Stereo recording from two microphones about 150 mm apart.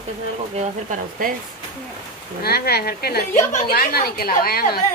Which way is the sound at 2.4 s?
90° left.